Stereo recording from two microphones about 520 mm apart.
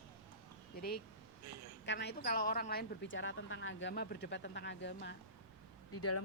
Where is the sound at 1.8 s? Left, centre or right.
Centre.